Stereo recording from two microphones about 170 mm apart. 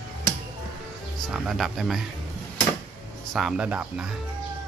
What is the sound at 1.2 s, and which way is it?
Speech, centre (ahead or behind).